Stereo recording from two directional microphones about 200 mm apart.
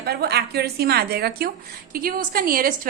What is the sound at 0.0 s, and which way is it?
A woman's voice, 50° right (ahead or behind).